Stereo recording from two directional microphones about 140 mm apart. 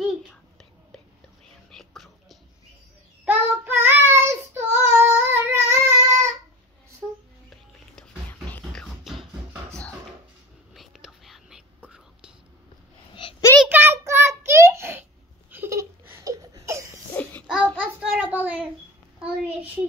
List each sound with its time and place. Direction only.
0.0 s a sound: 5° left (ahead or behind)
1.7 s whispering: centre (ahead or behind)
3.3 s child singing: 15° right (ahead or behind)
7.4 s music: 5° left (ahead or behind)
10.7 s whispering: centre (ahead or behind)
13.1 s a sound: 35° left (ahead or behind)
13.7 s child singing: 15° right (ahead or behind)
15.5 s laughter: 15° right (ahead or behind)
17.1 s child singing: 10° left (ahead or behind)
17.7 s a sound: 10° right (ahead or behind)